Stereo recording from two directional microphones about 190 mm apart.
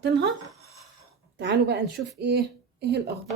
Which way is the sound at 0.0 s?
65° right (ahead or behind).